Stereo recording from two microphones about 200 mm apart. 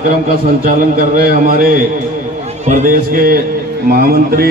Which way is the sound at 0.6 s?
45° right (ahead or behind).